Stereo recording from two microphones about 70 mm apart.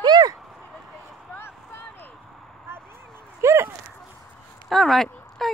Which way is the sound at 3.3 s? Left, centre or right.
Right.